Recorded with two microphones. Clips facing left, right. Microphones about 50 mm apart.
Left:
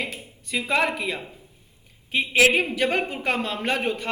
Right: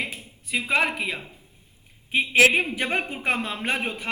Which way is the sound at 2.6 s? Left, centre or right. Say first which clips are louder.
Left 2 dB; right.